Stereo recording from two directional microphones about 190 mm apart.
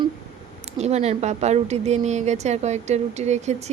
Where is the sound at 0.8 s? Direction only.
35° right (ahead or behind).